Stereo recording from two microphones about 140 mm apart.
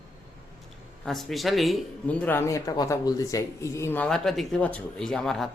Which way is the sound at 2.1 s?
10° left (ahead or behind).